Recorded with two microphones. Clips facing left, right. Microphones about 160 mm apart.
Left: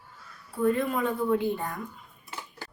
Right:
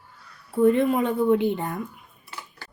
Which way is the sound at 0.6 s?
20° right (ahead or behind).